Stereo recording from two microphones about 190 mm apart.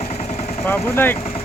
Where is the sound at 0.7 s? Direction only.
10° left (ahead or behind).